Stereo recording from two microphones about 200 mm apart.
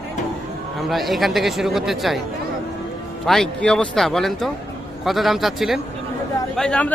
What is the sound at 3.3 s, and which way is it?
Speech, centre (ahead or behind).